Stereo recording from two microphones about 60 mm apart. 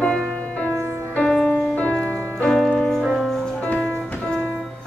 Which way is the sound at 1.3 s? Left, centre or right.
Centre.